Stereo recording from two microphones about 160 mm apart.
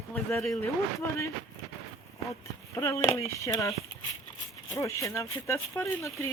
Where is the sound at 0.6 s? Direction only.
15° left (ahead or behind).